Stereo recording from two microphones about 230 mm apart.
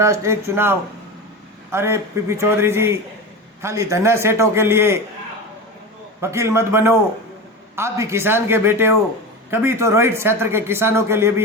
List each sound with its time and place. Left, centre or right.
0.0 s speech: centre
6.3 s speech: centre